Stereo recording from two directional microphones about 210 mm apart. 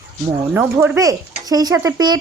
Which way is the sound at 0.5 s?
10° right (ahead or behind).